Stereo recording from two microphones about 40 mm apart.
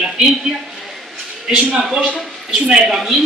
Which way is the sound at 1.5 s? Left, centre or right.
Centre.